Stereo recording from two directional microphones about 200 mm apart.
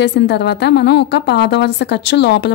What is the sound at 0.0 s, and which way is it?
A woman's voice, 60° left (ahead or behind).